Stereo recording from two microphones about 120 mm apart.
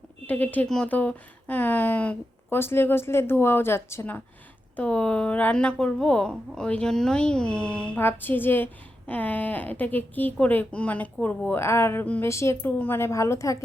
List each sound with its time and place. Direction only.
0.3 s a woman's voice: 15° left (ahead or behind)